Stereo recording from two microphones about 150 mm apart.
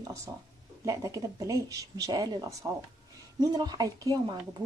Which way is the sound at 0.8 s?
20° right (ahead or behind).